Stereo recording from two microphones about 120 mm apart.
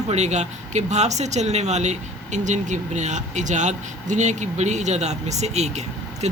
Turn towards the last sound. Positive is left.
turn(degrees=-65)  # may be behind; listen again after turning